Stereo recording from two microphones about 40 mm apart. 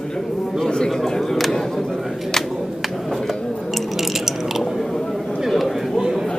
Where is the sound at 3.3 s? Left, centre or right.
Centre.